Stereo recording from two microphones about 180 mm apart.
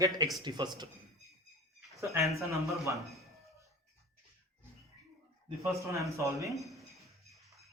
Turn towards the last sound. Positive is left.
turn(degrees=0)  # may be behind; listen again after turning